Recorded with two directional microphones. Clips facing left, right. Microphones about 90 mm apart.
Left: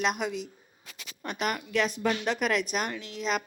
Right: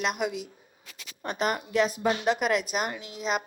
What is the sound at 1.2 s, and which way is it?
Speech, 35° right (ahead or behind).